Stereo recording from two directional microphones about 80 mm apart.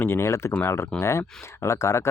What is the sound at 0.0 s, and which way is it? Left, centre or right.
Speech, left.